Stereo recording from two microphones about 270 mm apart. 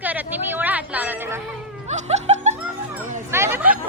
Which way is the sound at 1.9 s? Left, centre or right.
Right.